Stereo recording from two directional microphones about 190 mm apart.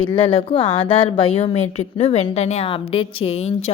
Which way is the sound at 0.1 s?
30° left (ahead or behind).